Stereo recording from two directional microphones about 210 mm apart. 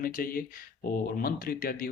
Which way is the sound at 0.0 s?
45° left (ahead or behind).